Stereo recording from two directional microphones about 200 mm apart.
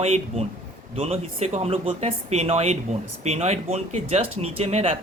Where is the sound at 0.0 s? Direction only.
30° right (ahead or behind).